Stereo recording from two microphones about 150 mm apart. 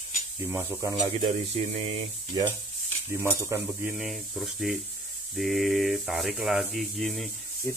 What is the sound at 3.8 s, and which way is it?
Speech, 5° right (ahead or behind).